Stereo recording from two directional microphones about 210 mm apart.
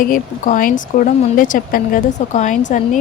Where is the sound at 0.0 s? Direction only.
40° left (ahead or behind).